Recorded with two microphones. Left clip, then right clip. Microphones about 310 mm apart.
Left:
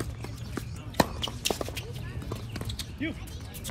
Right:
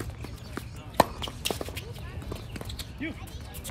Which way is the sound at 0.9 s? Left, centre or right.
Centre.